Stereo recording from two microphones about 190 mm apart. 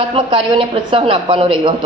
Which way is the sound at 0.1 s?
30° right (ahead or behind).